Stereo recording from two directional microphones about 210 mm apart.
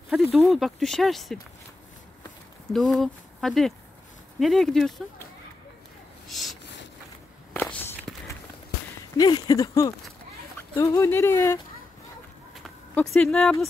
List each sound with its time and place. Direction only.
0.1 s speech: centre (ahead or behind)
2.7 s speech: centre (ahead or behind)
6.2 s speech: centre (ahead or behind)
7.5 s walk: 10° left (ahead or behind)
9.1 s speech: 20° left (ahead or behind)
12.6 s speech: centre (ahead or behind)